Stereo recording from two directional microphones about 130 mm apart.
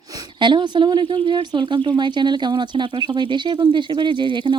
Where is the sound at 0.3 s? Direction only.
35° right (ahead or behind).